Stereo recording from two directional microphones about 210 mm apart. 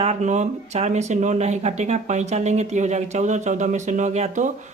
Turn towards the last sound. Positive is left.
turn(degrees=-35)  # may be behind; listen again after turning